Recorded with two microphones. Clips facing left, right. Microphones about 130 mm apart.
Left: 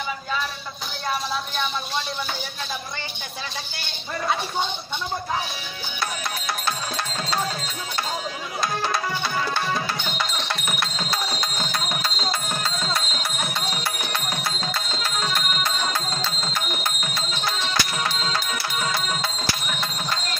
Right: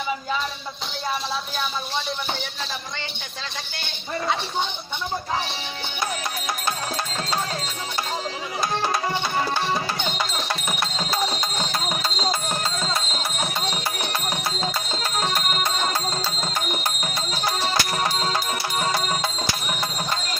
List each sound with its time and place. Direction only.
10.3 s music: 35° right (ahead or behind)
14.6 s music: 40° right (ahead or behind)
17.0 s music: 40° right (ahead or behind)